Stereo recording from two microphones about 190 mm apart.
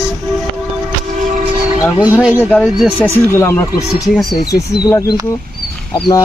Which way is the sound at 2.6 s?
5° right (ahead or behind).